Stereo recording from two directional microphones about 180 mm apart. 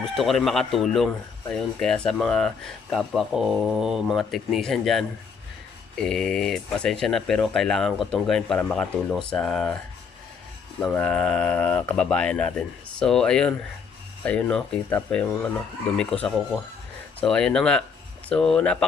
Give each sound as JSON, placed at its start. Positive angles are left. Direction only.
{"t": 0.0, "sound": "speech", "side_deg": 0}
{"t": 10.8, "sound": "speech", "side_deg": 5}